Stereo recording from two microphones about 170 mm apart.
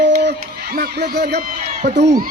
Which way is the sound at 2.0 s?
55° right (ahead or behind).